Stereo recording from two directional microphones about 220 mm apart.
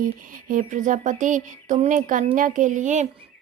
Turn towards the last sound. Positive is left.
turn(degrees=-35)  # may be behind; listen again after turning